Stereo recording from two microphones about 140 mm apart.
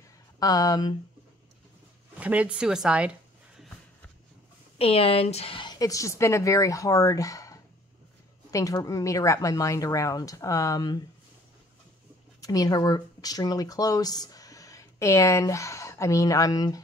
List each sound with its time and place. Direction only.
0.4 s a woman's voice: 25° left (ahead or behind)
2.1 s speech: 10° right (ahead or behind)
4.7 s a woman's voice: 45° left (ahead or behind)
12.4 s speech: 25° left (ahead or behind)